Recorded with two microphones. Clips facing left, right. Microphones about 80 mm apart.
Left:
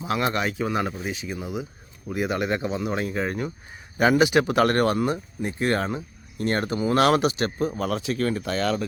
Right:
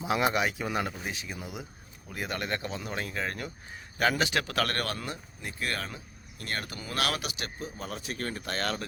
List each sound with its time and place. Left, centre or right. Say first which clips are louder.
0.0 s speech: left 2 dB; centre; by 7.7 s left
7.8 s speech: left 11 dB; left